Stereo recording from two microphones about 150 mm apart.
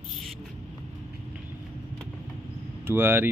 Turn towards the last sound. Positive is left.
turn(degrees=-15)  # may be behind; listen again after turning